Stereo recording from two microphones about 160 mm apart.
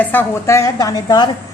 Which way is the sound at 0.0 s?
10° left (ahead or behind).